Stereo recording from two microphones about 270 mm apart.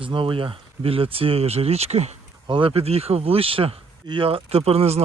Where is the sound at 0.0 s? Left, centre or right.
Centre.